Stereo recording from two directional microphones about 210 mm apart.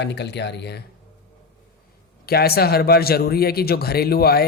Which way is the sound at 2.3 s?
50° left (ahead or behind).